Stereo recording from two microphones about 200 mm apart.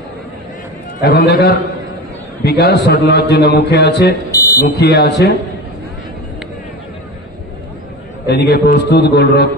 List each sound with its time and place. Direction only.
1.0 s a man's voice: 55° left (ahead or behind)
4.3 s smoke detector: 15° left (ahead or behind)
4.6 s a man's voice: 50° left (ahead or behind)
8.3 s a man's voice: 55° left (ahead or behind)